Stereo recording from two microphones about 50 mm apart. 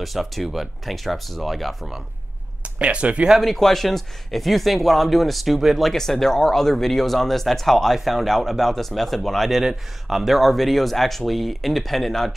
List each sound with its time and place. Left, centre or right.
0.0 s speech: centre
2.6 s speech: right
3.3 s speech: centre
9.6 s speech: centre